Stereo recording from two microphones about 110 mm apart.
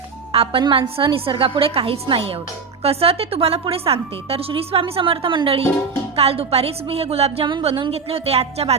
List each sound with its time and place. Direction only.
0.3 s a woman's voice: 55° right (ahead or behind)
6.1 s a woman's voice: 65° right (ahead or behind)